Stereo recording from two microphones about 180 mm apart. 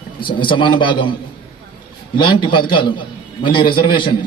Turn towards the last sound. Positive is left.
turn(degrees=25)  # may be behind; listen again after turning